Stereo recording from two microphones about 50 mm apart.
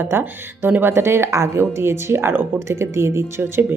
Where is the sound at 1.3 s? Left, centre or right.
Right.